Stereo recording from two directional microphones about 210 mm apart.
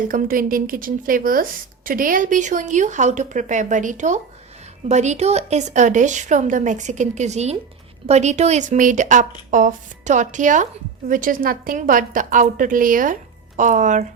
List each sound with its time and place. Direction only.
0.1 s a woman's voice: 40° right (ahead or behind)